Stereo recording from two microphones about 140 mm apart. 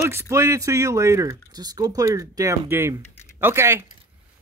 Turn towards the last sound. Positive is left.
turn(degrees=-15)  # may be behind; listen again after turning